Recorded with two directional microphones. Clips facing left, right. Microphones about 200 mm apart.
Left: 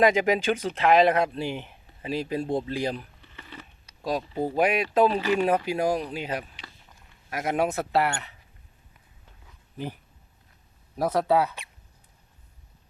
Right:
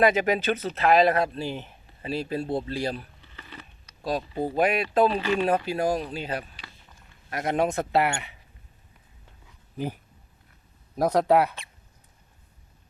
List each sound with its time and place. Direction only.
0.0 s speech: 15° left (ahead or behind); by 8.4 s 10° right (ahead or behind)
9.7 s speech: 45° right (ahead or behind)
10.9 s speech: 15° right (ahead or behind)